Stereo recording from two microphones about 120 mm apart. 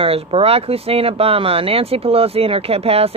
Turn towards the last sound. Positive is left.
turn(degrees=-55)  # may be behind; listen again after turning